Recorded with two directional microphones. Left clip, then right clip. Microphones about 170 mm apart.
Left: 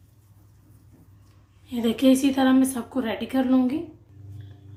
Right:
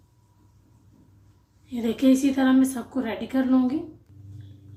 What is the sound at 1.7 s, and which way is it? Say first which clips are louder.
A woman's voice: left 1 dB; 30° left (ahead or behind).